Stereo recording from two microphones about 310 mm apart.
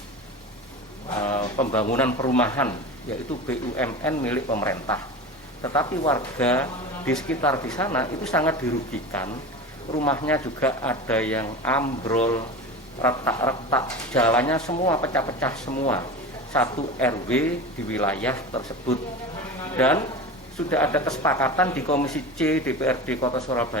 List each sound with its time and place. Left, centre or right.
1.1 s speech: centre
15.6 s speech: left
16.5 s speech: centre
19.7 s speech: centre